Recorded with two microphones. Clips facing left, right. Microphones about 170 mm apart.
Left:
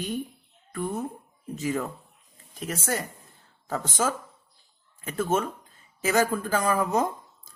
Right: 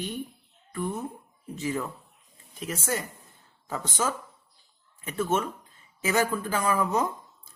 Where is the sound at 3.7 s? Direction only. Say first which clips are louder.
Left 2 dB; 45° left (ahead or behind).